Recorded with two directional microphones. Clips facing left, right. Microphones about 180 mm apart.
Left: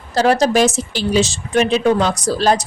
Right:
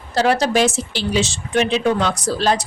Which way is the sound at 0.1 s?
40° left (ahead or behind).